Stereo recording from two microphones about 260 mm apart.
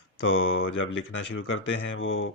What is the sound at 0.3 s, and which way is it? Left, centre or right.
Speech, left.